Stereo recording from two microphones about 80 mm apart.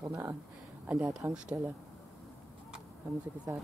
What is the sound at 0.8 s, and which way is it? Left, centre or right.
Speech, centre.